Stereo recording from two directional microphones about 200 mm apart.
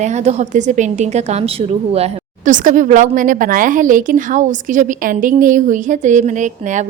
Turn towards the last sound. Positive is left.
turn(degrees=-40)  # may be behind; listen again after turning